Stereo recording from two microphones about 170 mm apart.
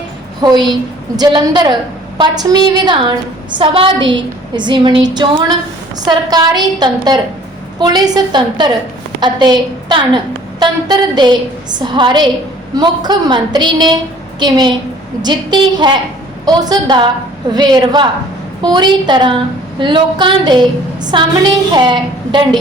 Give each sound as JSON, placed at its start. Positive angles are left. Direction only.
{"t": 0.4, "sound": "a woman's voice", "side_deg": -25}